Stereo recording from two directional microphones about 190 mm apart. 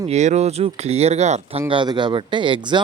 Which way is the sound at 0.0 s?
35° right (ahead or behind).